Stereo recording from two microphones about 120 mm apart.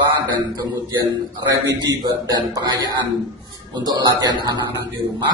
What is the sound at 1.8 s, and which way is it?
A man's voice, 35° right (ahead or behind).